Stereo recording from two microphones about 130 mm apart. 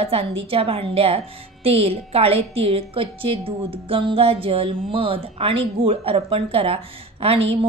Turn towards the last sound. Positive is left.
turn(degrees=-50)  # may be behind; listen again after turning